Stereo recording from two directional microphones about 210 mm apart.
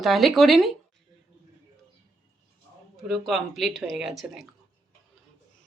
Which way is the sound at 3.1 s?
Centre (ahead or behind).